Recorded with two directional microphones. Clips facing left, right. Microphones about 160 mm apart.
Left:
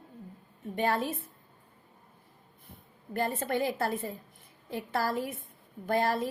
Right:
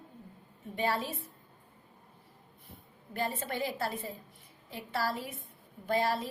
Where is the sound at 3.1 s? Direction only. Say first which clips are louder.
Left 5 dB; 50° left (ahead or behind).